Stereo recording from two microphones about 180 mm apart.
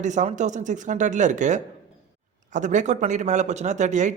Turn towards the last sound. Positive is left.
turn(degrees=-40)  # may be behind; listen again after turning